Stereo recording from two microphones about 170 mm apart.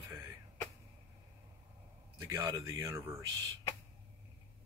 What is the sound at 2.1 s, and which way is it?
Speech, 20° right (ahead or behind).